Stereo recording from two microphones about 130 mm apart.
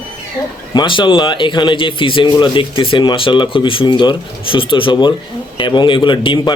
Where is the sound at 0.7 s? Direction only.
35° left (ahead or behind).